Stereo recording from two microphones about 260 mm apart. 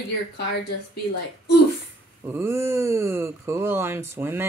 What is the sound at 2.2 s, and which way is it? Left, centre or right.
Speech, centre.